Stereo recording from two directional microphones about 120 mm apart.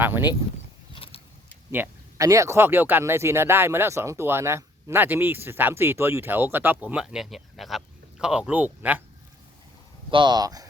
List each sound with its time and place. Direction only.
0.0 s speech: 15° right (ahead or behind)
0.9 s vehicle: 50° left (ahead or behind)
1.7 s speech: 25° right (ahead or behind)
10.1 s speech: 40° right (ahead or behind)